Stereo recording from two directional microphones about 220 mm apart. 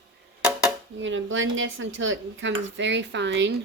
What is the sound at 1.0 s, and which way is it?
Speech, 55° right (ahead or behind).